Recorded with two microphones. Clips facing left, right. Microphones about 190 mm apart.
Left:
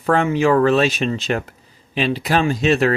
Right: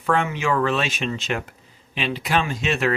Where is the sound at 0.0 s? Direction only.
35° left (ahead or behind).